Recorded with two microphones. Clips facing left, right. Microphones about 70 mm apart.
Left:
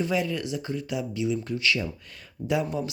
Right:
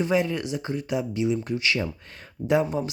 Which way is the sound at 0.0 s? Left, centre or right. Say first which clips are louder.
Right 3 dB; right.